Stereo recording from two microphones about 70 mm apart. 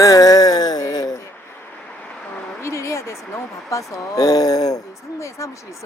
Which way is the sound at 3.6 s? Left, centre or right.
Left.